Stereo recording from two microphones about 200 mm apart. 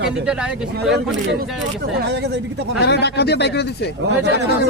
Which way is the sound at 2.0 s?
55° right (ahead or behind).